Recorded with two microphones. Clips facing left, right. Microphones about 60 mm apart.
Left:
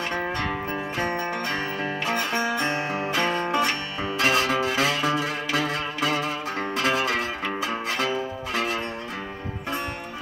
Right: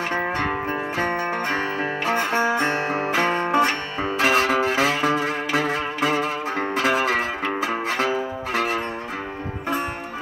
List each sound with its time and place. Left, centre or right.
0.2 s music: right
0.9 s music: centre
1.3 s music: right
2.6 s music: right
3.1 s music: centre
5.7 s music: centre
6.9 s music: right